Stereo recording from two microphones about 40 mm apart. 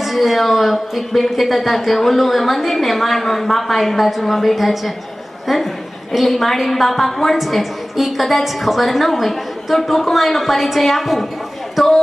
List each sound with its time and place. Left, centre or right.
0.0 s a woman's voice: centre